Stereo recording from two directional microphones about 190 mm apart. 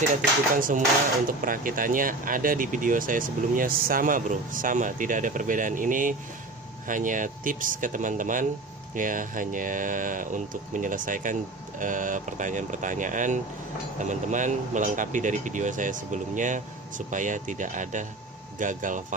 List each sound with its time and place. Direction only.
0.1 s speech: 45° right (ahead or behind)